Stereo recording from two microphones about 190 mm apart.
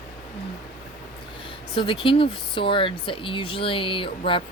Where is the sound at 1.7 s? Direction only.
25° left (ahead or behind).